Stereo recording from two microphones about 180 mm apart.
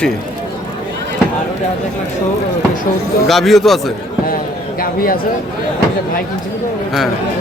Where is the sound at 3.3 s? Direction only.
Centre (ahead or behind).